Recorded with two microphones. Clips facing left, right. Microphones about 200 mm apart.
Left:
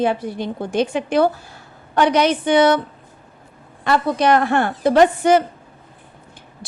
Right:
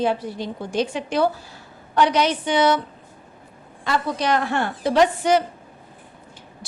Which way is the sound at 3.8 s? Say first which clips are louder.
Left 6 dB; 55° left (ahead or behind).